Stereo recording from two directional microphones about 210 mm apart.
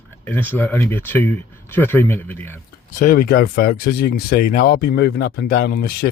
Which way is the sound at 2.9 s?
40° left (ahead or behind).